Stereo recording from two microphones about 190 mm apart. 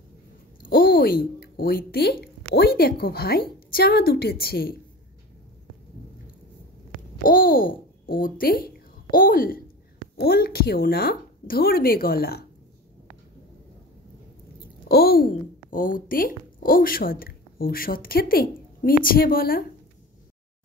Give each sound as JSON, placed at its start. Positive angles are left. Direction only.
{"t": 0.7, "sound": "a woman's voice", "side_deg": 50}
{"t": 6.9, "sound": "babbling", "side_deg": 25}
{"t": 7.2, "sound": "a child's voice", "side_deg": 50}
{"t": 14.9, "sound": "a woman's voice", "side_deg": 55}